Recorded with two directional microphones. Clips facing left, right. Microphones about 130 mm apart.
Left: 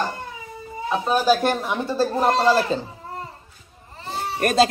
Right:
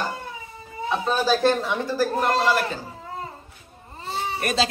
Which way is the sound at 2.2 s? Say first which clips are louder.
Left 6 dB; 35° left (ahead or behind).